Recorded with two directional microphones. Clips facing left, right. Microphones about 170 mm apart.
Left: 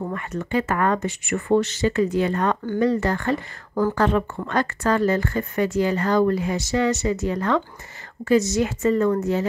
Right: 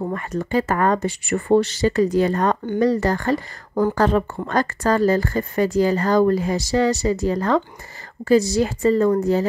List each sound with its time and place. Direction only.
0.1 s a woman's voice: 35° right (ahead or behind)